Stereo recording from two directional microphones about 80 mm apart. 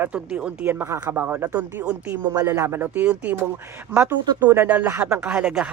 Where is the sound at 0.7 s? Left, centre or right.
Right.